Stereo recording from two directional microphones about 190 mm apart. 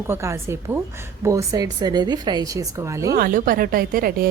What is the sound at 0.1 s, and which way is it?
A woman's voice, 15° right (ahead or behind).